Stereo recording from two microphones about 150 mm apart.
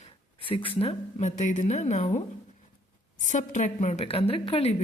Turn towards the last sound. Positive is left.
turn(degrees=40)  # may be behind; listen again after turning